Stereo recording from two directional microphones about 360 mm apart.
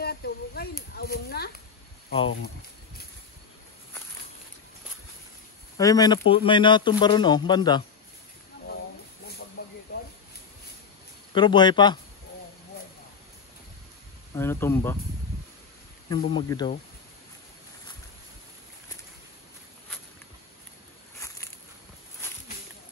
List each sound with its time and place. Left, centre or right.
0.0 s a sound: left
5.8 s speech: centre
9.6 s hiss: left
11.3 s speech: centre
14.3 s speech: centre
16.3 s speech: centre